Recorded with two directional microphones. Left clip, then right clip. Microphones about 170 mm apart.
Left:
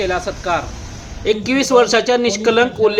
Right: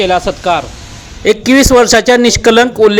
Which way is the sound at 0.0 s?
50° right (ahead or behind).